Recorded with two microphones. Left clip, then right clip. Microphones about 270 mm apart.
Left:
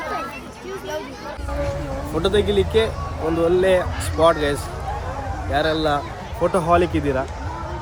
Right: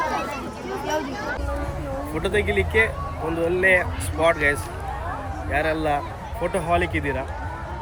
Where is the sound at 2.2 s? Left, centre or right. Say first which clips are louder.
Left 4 dB; centre.